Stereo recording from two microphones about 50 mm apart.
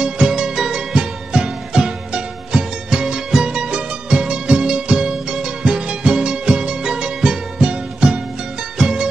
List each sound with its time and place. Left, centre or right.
0.0 s music: centre